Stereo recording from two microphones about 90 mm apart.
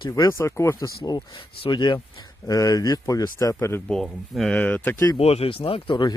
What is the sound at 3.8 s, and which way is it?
Speech, 5° left (ahead or behind).